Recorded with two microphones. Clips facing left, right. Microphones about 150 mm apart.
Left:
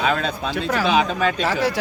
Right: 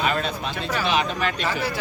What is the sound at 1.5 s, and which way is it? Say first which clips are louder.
Speech: left 5 dB; 90° left.